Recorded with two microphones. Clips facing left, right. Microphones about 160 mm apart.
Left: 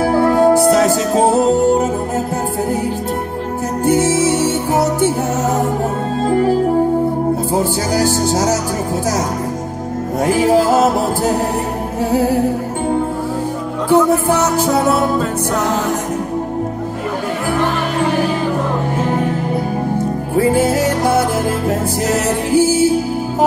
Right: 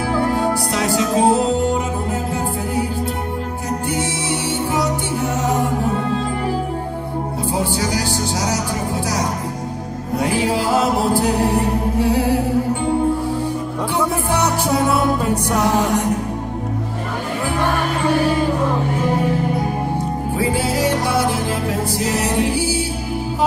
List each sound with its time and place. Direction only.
0.0 s music: 45° left (ahead or behind)
3.8 s music: 45° left (ahead or behind)
6.2 s music: 45° left (ahead or behind)
7.5 s music: 45° left (ahead or behind)
10.2 s music: 45° left (ahead or behind)
13.9 s music: 15° right (ahead or behind)
20.3 s music: 45° left (ahead or behind)